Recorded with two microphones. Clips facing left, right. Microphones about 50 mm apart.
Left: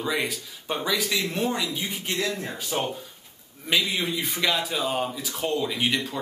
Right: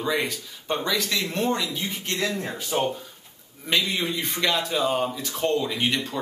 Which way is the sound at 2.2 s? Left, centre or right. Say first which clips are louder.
Right 2 dB; centre.